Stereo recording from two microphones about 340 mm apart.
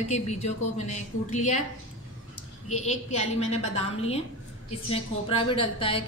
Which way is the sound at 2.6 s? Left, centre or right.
Centre.